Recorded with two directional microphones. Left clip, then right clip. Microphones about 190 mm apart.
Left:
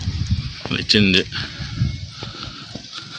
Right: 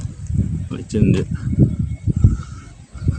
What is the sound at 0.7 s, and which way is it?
Speech, 5° left (ahead or behind).